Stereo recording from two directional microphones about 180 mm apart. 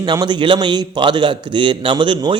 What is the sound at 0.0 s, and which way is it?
A man's voice, 25° right (ahead or behind).